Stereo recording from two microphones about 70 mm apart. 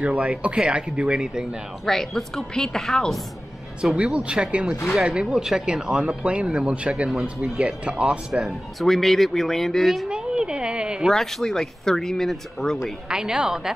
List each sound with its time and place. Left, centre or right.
0.0 s speech: centre
1.9 s speech: centre
3.8 s speech: centre
8.5 s speech: centre
10.0 s a woman's voice: centre
11.1 s speech: centre
13.1 s speech: centre